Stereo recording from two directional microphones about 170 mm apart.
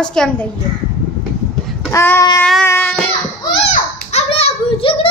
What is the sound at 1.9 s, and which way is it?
Speech, 15° left (ahead or behind).